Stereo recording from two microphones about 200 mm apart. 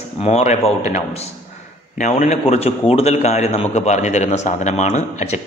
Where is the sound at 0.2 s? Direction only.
35° left (ahead or behind).